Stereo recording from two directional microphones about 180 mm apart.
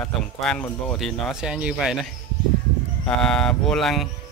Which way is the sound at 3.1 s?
5° left (ahead or behind).